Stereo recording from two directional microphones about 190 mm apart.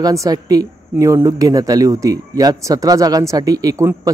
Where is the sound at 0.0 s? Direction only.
20° right (ahead or behind).